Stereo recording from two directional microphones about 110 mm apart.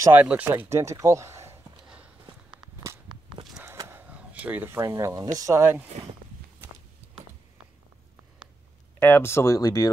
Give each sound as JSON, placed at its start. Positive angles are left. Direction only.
{"t": 0.2, "sound": "speech", "side_deg": -10}
{"t": 0.5, "sound": "speech", "side_deg": -25}
{"t": 3.6, "sound": "a sound", "side_deg": -25}
{"t": 4.0, "sound": "speech", "side_deg": -15}
{"t": 9.0, "sound": "speech", "side_deg": 20}